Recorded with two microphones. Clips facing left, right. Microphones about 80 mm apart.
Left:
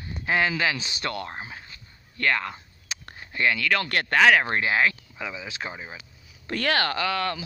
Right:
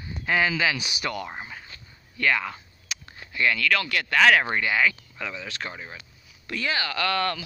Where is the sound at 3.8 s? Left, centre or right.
Left.